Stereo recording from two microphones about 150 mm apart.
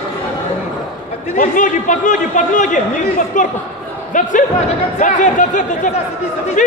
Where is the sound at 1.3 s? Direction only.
60° left (ahead or behind).